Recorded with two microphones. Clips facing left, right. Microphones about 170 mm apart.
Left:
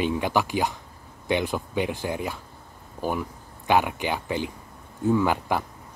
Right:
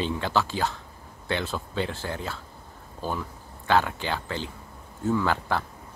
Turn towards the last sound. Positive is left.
turn(degrees=15)  # may be behind; listen again after turning